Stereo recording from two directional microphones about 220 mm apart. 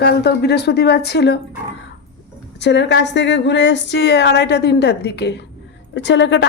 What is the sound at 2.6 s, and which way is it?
A woman's voice, 50° left (ahead or behind).